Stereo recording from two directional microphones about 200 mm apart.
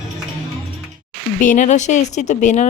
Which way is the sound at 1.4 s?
40° left (ahead or behind).